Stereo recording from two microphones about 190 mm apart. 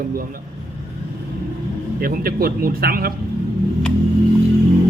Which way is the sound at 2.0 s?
50° right (ahead or behind).